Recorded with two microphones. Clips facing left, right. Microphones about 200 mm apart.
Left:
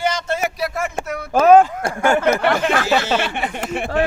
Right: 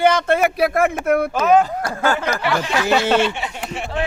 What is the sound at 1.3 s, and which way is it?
A man's voice, 50° left (ahead or behind).